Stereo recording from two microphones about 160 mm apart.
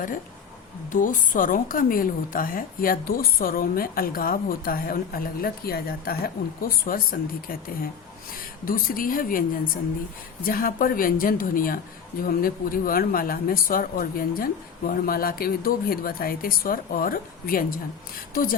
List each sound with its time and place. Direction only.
0.9 s a woman's voice: 55° left (ahead or behind)
8.6 s a woman's voice: 60° left (ahead or behind)
10.4 s a woman's voice: 60° left (ahead or behind)